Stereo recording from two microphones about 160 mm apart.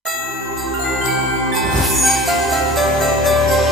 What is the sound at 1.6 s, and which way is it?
Music, centre (ahead or behind).